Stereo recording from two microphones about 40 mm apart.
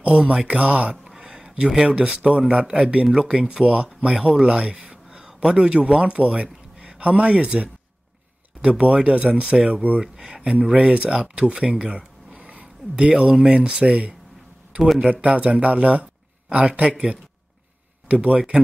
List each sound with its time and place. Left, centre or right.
0.5 s speech: right
1.0 s a sound: centre
1.3 s a sound: right
1.9 s speech: right
10.1 s speech: centre
10.5 s speech: right
14.8 s speech: centre
15.2 s speech: right
18.0 s speech: right